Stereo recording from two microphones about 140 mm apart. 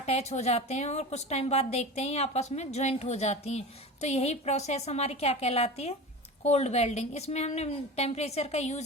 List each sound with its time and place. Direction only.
0.0 s a woman's voice: 50° left (ahead or behind)